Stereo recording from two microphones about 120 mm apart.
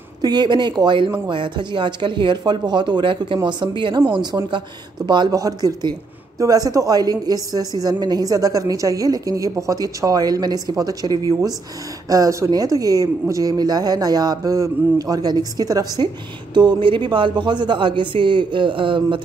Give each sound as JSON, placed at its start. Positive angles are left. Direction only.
{"t": 0.2, "sound": "speech", "side_deg": -35}